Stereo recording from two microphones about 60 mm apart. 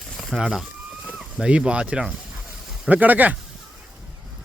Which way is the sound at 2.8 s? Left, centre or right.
Right.